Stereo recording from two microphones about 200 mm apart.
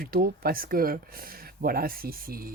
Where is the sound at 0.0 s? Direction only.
50° right (ahead or behind).